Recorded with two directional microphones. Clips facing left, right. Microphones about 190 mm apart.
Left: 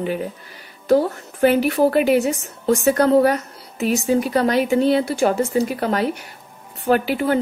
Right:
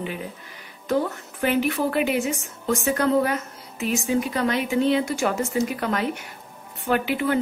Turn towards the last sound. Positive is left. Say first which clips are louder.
# left 4 dB
turn(degrees=40)  # may be behind; listen again after turning